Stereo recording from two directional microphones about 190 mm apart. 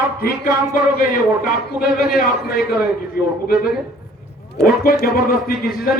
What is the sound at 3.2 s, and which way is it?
Speech, 50° left (ahead or behind).